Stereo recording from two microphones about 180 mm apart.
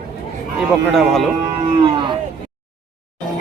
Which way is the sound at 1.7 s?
30° right (ahead or behind).